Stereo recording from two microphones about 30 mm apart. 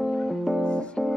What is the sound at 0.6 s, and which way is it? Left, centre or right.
Music, left.